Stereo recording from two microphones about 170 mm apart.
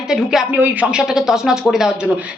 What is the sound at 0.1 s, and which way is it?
A woman's voice, 5° right (ahead or behind).